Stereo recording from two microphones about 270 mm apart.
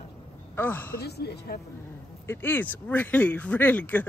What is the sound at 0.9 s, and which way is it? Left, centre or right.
Speech, left.